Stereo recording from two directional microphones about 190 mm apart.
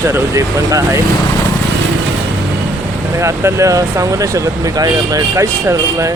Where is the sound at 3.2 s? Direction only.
15° right (ahead or behind).